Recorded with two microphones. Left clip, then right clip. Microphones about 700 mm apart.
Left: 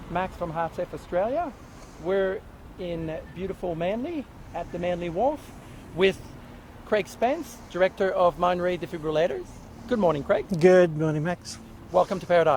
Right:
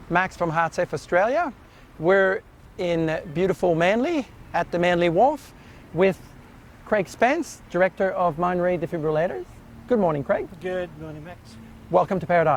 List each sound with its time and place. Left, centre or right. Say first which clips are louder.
0.1 s speech: right 7 dB; right
6.9 s speech: right 4 dB; right
10.6 s speech: left 11 dB; left
12.0 s speech: right 1 dB; right